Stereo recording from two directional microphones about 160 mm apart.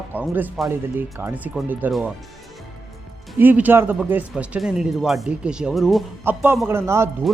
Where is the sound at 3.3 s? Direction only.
10° right (ahead or behind).